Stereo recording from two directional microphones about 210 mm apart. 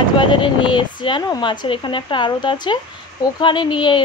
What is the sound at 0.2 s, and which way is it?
Speech, 25° left (ahead or behind).